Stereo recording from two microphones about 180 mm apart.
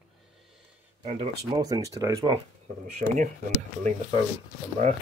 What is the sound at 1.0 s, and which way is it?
Speech, 30° right (ahead or behind).